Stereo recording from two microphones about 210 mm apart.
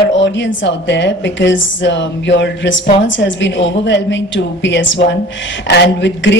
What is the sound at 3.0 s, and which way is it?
A woman's voice, 60° left (ahead or behind).